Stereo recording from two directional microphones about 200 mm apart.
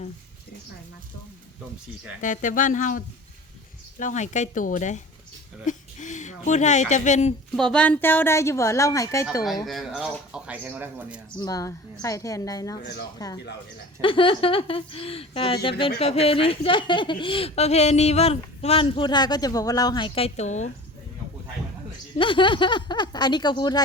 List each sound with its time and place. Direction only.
2.2 s speech: 40° left (ahead or behind)
4.0 s speech: 35° left (ahead or behind)
7.5 s a woman's voice: 5° left (ahead or behind)
9.6 s speech: centre (ahead or behind)
11.3 s a woman's voice: 20° left (ahead or behind)
12.8 s speech: 55° left (ahead or behind)
13.1 s a woman's voice: 20° left (ahead or behind); by 20.7 s 35° left (ahead or behind)
22.2 s speech: 25° left (ahead or behind)